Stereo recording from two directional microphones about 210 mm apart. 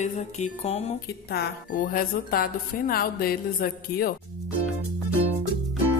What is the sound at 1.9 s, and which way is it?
A woman's voice, 45° left (ahead or behind).